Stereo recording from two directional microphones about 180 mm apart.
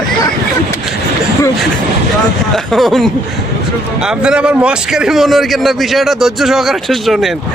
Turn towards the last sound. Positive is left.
turn(degrees=0)  # may be behind; listen again after turning